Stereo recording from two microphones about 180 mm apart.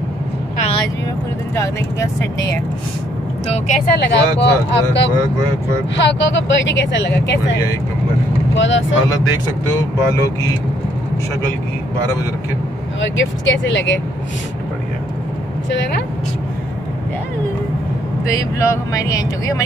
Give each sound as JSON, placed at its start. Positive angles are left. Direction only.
{"t": 0.6, "sound": "vehicle", "side_deg": 35}
{"t": 1.5, "sound": "speech", "side_deg": 15}
{"t": 3.4, "sound": "a woman's voice", "side_deg": 35}
{"t": 4.0, "sound": "speech", "side_deg": 75}
{"t": 5.9, "sound": "speech", "side_deg": 90}
{"t": 8.5, "sound": "speech", "side_deg": 90}
{"t": 13.0, "sound": "speech", "side_deg": 90}
{"t": 15.7, "sound": "speech", "side_deg": 80}
{"t": 18.7, "sound": "speech", "side_deg": 20}